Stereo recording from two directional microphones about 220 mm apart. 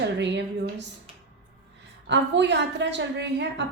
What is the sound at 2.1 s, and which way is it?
A woman's voice, 55° right (ahead or behind).